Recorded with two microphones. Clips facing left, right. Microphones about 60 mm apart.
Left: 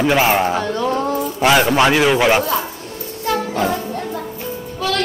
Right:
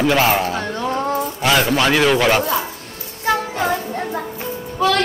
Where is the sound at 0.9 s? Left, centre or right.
Right.